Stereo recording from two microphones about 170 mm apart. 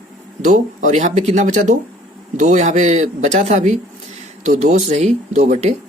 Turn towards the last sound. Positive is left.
turn(degrees=-45)  # may be behind; listen again after turning